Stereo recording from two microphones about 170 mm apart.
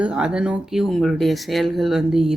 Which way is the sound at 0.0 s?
5° right (ahead or behind).